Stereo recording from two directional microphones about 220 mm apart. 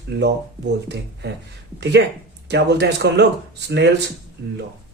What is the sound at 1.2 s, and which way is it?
Speech, 50° right (ahead or behind).